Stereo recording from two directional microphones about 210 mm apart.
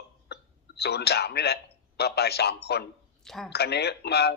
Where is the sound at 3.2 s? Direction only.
Centre (ahead or behind).